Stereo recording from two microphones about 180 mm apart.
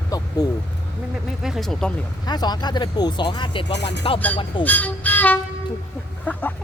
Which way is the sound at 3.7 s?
70° left (ahead or behind).